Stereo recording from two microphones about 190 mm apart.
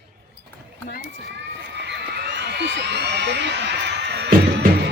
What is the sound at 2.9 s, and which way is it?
Music, 60° right (ahead or behind).